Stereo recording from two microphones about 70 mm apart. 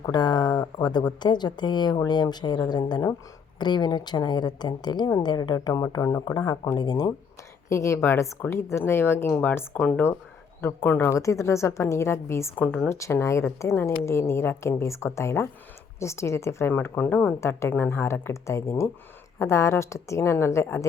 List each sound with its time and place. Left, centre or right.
0.0 s speech: left
5.5 s speech: left
6.3 s speech: left
6.7 s speech: left
7.7 s a woman's voice: left
9.3 s speech: left
10.6 s a woman's voice: left
11.1 s speech: left
12.5 s speech: centre
12.9 s a woman's voice: left
17.4 s a woman's voice: left